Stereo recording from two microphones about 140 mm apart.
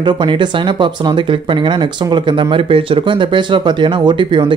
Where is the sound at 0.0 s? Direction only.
35° right (ahead or behind).